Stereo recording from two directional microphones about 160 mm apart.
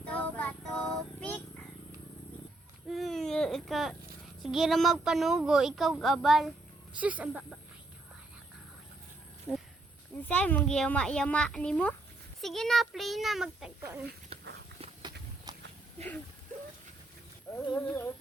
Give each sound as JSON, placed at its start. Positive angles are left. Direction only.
{"t": 0.1, "sound": "child singing", "side_deg": 10}
{"t": 2.9, "sound": "baby cry", "side_deg": 0}
{"t": 4.4, "sound": "speech", "side_deg": 0}
{"t": 10.2, "sound": "speech", "side_deg": 10}
{"t": 14.3, "sound": "a sound", "side_deg": -40}
{"t": 15.5, "sound": "walk", "side_deg": -25}
{"t": 17.8, "sound": "speech", "side_deg": 10}